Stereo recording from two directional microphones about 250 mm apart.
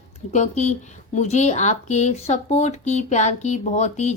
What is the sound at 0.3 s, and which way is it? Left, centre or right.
Speech, left.